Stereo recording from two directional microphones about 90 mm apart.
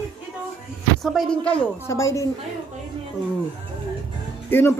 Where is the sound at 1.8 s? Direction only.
35° left (ahead or behind).